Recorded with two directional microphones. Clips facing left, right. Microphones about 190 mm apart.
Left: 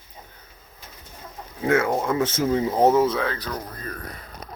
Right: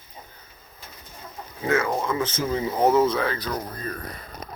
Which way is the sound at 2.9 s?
5° left (ahead or behind).